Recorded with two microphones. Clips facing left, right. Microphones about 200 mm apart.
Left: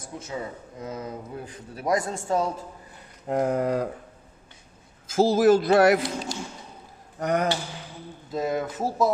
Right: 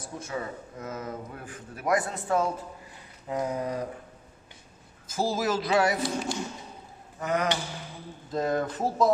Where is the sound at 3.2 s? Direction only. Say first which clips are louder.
Left 6 dB; 60° left (ahead or behind).